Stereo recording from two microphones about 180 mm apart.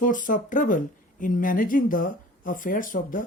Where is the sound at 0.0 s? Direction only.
45° left (ahead or behind).